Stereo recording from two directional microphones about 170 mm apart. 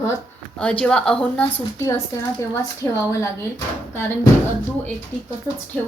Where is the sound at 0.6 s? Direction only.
5° left (ahead or behind).